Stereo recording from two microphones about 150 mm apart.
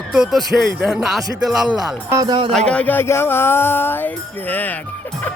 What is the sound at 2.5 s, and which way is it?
Speech, 5° left (ahead or behind).